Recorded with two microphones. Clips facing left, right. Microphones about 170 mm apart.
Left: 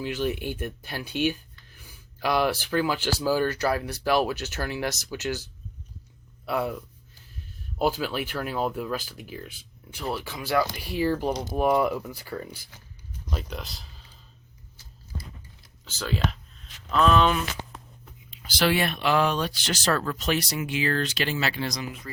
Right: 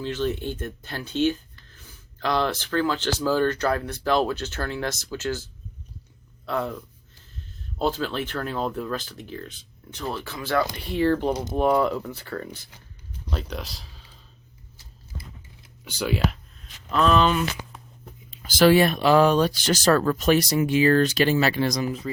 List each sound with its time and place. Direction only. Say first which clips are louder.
0.0 s speech: right 1 dB; 15° left (ahead or behind)
6.4 s speech: even; 10° left (ahead or behind)
7.8 s speech: even; 10° left (ahead or behind)
15.8 s speech: right 4 dB; 10° right (ahead or behind)
18.0 s speech: right 4 dB; 45° right (ahead or behind)